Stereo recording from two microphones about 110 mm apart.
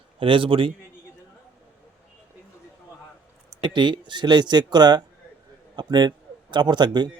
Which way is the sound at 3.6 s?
45° right (ahead or behind).